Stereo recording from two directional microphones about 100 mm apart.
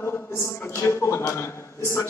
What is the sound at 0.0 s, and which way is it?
A man's voice, 25° left (ahead or behind).